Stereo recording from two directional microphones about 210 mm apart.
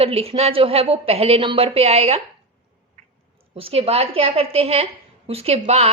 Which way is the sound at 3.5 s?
30° right (ahead or behind).